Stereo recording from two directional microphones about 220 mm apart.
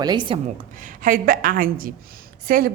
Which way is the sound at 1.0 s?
40° right (ahead or behind).